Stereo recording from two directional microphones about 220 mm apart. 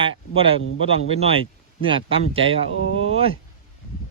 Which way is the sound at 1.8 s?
25° right (ahead or behind).